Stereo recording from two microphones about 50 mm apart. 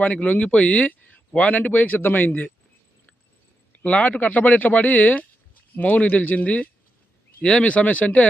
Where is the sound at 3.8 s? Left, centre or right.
Left.